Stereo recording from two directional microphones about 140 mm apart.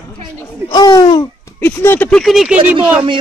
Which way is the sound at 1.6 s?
15° left (ahead or behind).